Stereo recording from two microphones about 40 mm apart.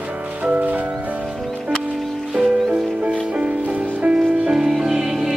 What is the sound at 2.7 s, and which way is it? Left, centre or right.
Music, right.